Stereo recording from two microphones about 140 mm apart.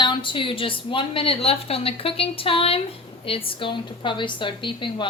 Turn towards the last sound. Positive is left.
turn(degrees=35)  # may be behind; listen again after turning